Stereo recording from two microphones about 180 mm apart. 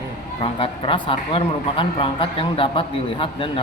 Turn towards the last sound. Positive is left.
turn(degrees=30)  # may be behind; listen again after turning